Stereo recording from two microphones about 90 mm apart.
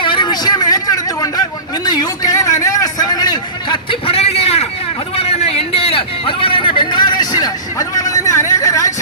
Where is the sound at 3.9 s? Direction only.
90° left.